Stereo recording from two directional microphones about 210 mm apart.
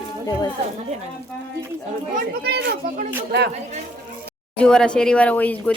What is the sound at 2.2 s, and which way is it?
Speech, 50° right (ahead or behind).